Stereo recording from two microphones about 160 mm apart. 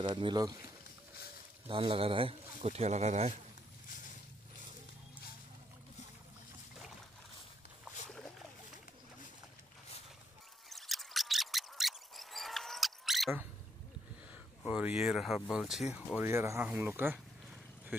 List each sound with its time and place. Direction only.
0.0 s speech: 30° right (ahead or behind)
1.7 s a man's voice: 35° right (ahead or behind)
7.8 s boat: 5° left (ahead or behind)
10.7 s a sound: centre (ahead or behind)
14.6 s a sound: 5° right (ahead or behind)
15.0 s speech: centre (ahead or behind)